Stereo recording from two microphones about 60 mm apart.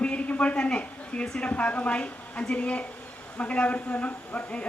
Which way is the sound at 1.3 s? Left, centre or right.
Left.